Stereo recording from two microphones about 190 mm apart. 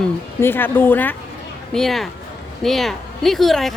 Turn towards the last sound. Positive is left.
turn(degrees=0)  # may be behind; listen again after turning